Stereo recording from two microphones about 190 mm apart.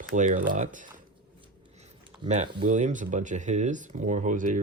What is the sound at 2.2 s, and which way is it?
Speech, 35° right (ahead or behind).